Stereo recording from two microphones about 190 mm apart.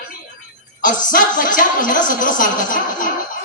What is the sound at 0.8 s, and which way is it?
Speech, 45° left (ahead or behind).